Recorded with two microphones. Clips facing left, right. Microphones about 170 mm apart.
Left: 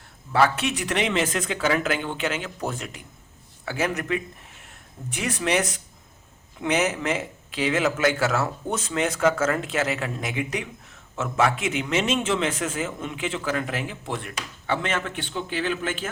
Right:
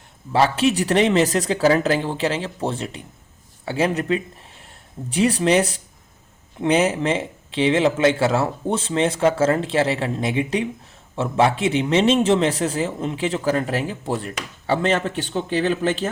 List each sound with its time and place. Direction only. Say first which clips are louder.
0.3 s a man's voice: right 4 dB; 30° right (ahead or behind)